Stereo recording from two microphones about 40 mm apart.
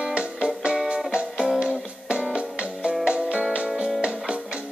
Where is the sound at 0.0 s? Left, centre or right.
Right.